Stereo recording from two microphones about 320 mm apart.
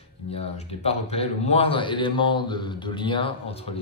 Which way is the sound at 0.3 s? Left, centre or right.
Centre.